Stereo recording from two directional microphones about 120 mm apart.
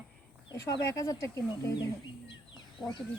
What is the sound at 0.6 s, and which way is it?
Speech, 25° left (ahead or behind).